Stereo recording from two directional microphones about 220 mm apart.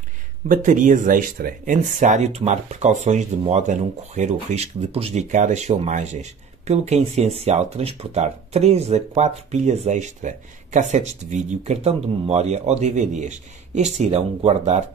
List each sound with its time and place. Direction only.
0.5 s speech: 35° right (ahead or behind)